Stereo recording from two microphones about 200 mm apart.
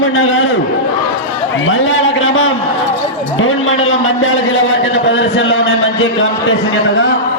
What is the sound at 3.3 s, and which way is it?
A man's voice, 90° left.